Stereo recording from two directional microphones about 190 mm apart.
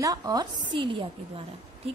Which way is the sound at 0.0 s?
20° right (ahead or behind).